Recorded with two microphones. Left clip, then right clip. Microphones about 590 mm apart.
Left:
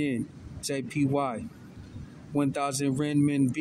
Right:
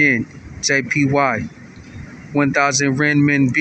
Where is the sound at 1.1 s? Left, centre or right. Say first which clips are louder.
Right 12 dB; left.